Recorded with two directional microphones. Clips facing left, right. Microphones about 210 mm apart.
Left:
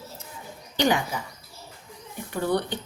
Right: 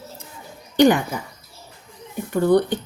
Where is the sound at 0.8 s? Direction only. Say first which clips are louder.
Right 9 dB; 50° right (ahead or behind).